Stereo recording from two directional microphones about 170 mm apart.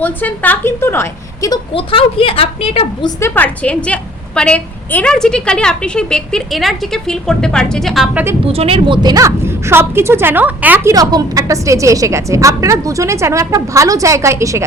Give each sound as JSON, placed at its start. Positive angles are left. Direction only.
{"t": 0.0, "sound": "a woman's voice", "side_deg": 10}
{"t": 1.7, "sound": "a woman's voice", "side_deg": 30}
{"t": 3.2, "sound": "a woman's voice", "side_deg": 15}
{"t": 8.4, "sound": "speech", "side_deg": -35}